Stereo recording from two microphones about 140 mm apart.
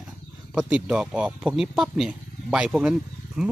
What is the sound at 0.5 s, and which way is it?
Speech, 5° right (ahead or behind).